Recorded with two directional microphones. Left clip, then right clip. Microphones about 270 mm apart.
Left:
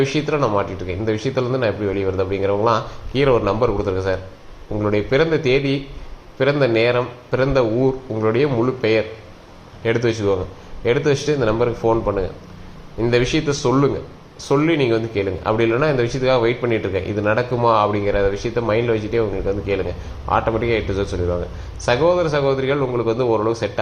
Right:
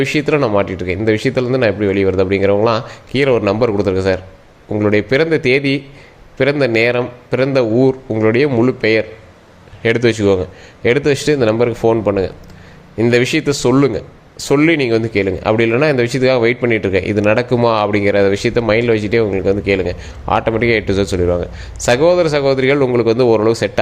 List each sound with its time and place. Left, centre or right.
0.0 s speech: right